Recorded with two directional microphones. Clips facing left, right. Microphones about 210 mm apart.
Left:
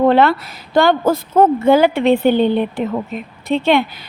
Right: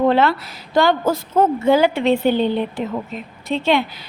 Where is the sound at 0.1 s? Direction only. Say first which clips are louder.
Left 3 dB; 55° left (ahead or behind).